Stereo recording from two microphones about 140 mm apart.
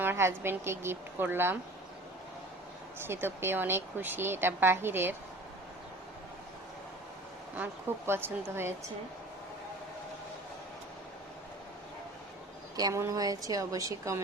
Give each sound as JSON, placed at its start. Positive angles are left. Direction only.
{"t": 0.0, "sound": "a woman's voice", "side_deg": -15}
{"t": 3.1, "sound": "a woman's voice", "side_deg": -15}
{"t": 7.5, "sound": "a woman's voice", "side_deg": -15}
{"t": 12.7, "sound": "a woman's voice", "side_deg": -25}